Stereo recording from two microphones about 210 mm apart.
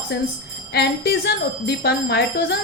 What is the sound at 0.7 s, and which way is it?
A woman's voice, 50° left (ahead or behind).